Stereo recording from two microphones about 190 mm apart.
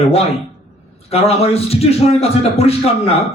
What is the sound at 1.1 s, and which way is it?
Speech, 30° left (ahead or behind).